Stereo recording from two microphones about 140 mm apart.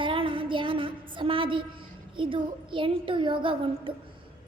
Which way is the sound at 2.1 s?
35° right (ahead or behind).